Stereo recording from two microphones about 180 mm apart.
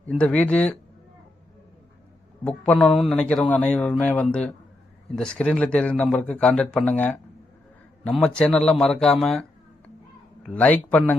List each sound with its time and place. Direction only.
0.0 s speech: 5° left (ahead or behind)
2.4 s a man's voice: 5° left (ahead or behind)
10.5 s speech: 10° left (ahead or behind)